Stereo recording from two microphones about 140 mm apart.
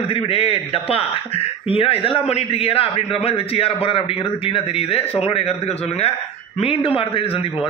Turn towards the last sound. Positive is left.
turn(degrees=40)  # may be behind; listen again after turning